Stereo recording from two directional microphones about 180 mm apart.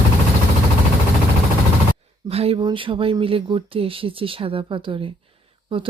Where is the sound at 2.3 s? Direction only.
35° right (ahead or behind).